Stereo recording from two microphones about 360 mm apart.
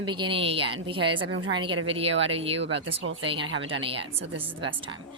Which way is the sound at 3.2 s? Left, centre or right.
Centre.